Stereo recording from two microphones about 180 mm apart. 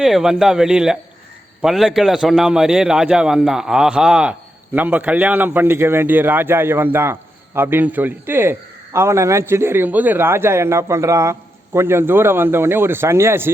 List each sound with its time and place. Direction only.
0.0 s a man's voice: centre (ahead or behind)